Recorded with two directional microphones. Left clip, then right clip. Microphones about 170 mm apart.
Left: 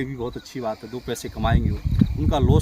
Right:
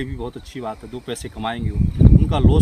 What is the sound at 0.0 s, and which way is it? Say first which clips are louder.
Speech: even; 15° left (ahead or behind).